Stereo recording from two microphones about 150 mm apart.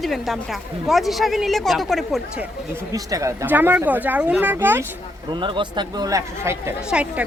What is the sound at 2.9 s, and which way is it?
A woman's voice, 20° right (ahead or behind).